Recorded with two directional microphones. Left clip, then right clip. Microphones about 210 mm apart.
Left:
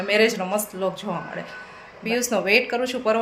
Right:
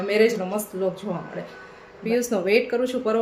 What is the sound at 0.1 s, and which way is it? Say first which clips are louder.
Speech: left 1 dB; centre (ahead or behind).